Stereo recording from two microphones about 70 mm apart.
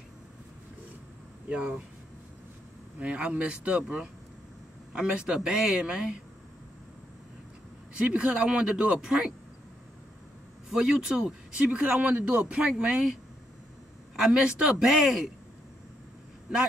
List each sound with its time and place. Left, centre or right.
1.5 s a man's voice: centre
3.0 s a man's voice: centre
8.0 s a man's voice: centre
10.7 s a man's voice: centre
14.1 s a man's voice: centre